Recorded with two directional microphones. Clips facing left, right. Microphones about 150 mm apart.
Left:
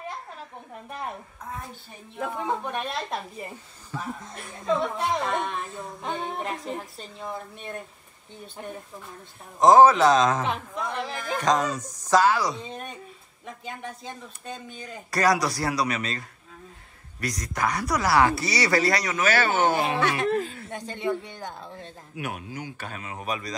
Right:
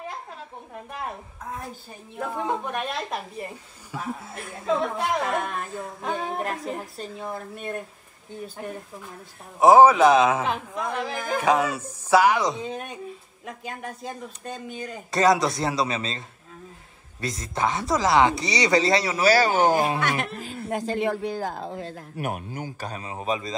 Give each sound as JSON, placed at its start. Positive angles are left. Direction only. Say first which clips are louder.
{"t": 2.1, "sound": "speech", "louder": "right 1 dB", "side_deg": 0}
{"t": 9.6, "sound": "speech", "louder": "right 1 dB", "side_deg": -10}
{"t": 12.5, "sound": "speech", "louder": "right 4 dB", "side_deg": 0}
{"t": 15.0, "sound": "speech", "louder": "right 3 dB", "side_deg": -25}
{"t": 20.7, "sound": "speech", "louder": "right 4 dB", "side_deg": -90}
{"t": 22.1, "sound": "speech", "louder": "right 2 dB", "side_deg": -45}